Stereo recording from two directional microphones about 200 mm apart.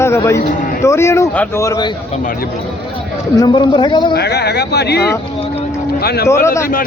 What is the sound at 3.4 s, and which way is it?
Speech, 25° left (ahead or behind).